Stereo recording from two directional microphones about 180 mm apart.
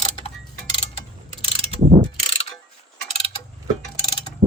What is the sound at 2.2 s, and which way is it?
Mechanisms, 30° left (ahead or behind).